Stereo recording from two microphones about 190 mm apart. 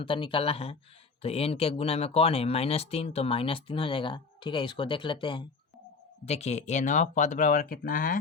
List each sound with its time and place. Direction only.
0.0 s speech: 25° left (ahead or behind); by 8.2 s 45° left (ahead or behind)